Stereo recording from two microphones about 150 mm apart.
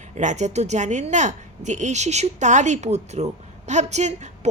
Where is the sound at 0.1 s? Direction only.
50° right (ahead or behind).